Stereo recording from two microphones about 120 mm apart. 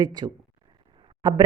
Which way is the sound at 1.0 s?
40° right (ahead or behind).